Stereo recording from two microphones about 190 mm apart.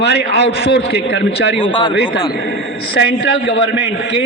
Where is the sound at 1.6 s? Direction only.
25° left (ahead or behind).